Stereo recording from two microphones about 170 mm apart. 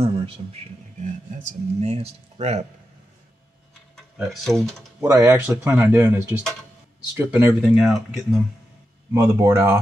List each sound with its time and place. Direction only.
0.0 s speech: 35° right (ahead or behind)
1.0 s speech: 45° right (ahead or behind)
3.9 s speech: centre (ahead or behind)
5.0 s speech: 15° right (ahead or behind)
9.1 s speech: 15° right (ahead or behind)